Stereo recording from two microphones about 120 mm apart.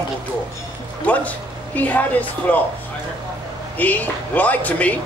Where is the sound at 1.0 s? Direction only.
10° left (ahead or behind).